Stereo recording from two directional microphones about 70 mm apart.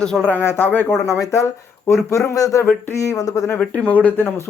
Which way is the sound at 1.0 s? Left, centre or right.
Left.